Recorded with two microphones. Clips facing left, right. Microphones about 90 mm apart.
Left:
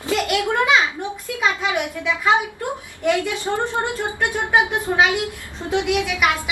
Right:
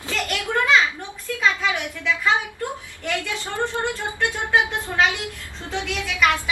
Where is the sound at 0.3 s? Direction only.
15° left (ahead or behind).